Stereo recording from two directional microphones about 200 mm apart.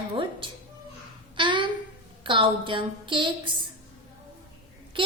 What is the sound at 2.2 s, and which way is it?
A woman's voice, 25° right (ahead or behind).